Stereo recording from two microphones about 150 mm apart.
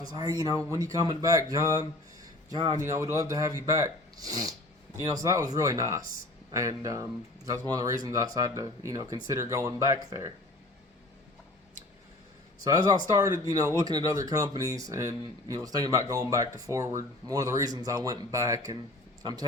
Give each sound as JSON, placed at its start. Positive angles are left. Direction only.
{"t": 0.0, "sound": "speech", "side_deg": -25}
{"t": 12.5, "sound": "speech", "side_deg": -25}